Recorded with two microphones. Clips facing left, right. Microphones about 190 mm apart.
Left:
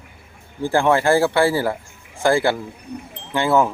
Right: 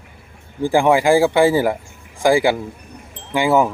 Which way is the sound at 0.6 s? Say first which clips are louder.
Right 3 dB; 15° right (ahead or behind).